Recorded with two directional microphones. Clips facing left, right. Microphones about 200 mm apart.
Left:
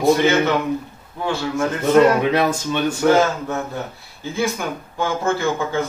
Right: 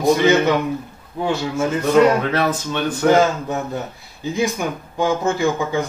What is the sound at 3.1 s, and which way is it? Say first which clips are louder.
Speech: right 2 dB; 15° right (ahead or behind).